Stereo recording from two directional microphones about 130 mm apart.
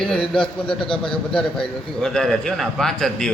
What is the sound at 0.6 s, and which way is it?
Speech, 40° left (ahead or behind).